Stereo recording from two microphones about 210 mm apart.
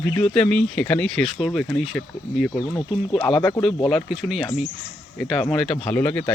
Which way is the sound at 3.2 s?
5° left (ahead or behind).